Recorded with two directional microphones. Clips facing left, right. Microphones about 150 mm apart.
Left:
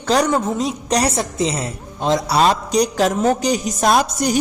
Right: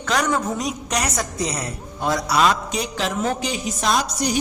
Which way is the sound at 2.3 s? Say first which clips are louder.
Left 4 dB; 35° left (ahead or behind).